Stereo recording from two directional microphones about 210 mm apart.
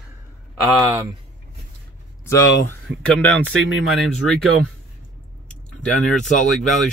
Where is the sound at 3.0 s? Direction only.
5° left (ahead or behind).